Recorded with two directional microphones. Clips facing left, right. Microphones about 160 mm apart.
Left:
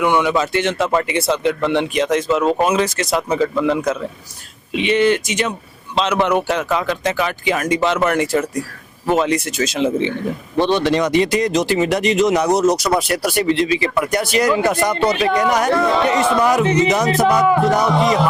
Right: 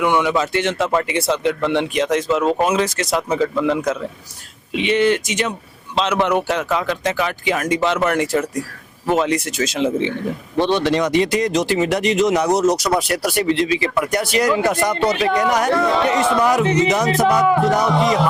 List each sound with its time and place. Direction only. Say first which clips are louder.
0.0 s speech: left 1 dB; 10° left (ahead or behind)
3.2 s speech: left 1 dB; 15° left (ahead or behind)